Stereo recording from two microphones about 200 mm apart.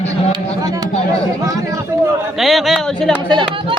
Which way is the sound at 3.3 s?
25° right (ahead or behind).